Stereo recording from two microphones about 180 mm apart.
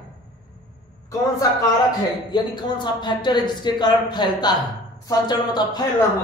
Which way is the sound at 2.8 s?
25° left (ahead or behind).